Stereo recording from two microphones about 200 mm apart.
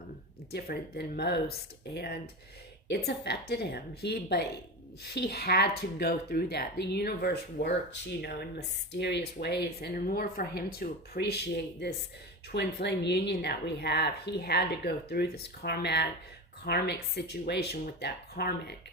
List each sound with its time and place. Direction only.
0.5 s speech: 50° left (ahead or behind)
2.9 s speech: 55° left (ahead or behind)
12.5 s speech: 55° left (ahead or behind)